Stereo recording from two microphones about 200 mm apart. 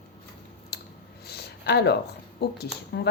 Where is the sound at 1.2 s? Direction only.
55° left (ahead or behind).